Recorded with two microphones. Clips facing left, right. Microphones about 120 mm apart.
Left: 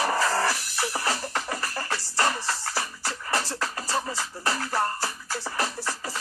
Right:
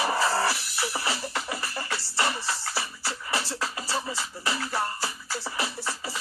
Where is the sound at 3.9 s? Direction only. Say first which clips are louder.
Left 4 dB; 35° left (ahead or behind).